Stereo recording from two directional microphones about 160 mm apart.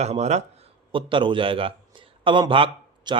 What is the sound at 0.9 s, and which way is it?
A man's voice, 30° right (ahead or behind).